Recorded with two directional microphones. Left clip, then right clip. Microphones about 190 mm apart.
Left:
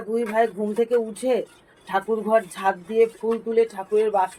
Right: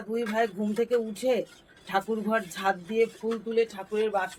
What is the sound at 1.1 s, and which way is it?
Speech, 15° right (ahead or behind).